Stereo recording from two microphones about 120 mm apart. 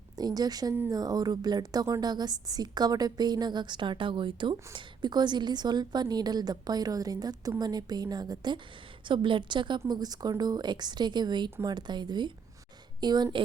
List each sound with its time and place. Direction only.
0.2 s a woman's voice: 35° right (ahead or behind)